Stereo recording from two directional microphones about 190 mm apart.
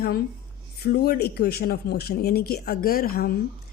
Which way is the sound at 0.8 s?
55° left (ahead or behind).